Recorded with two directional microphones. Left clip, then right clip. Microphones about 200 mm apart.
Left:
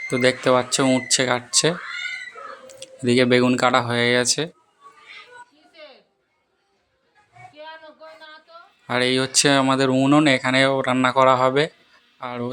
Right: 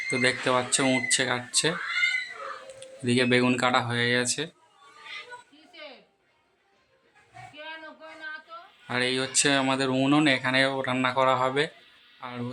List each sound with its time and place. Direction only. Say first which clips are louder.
0.1 s speech: left 7 dB; 25° left (ahead or behind)
2.8 s speech: left 7 dB; 25° left (ahead or behind)
8.9 s speech: left 6 dB; 30° left (ahead or behind)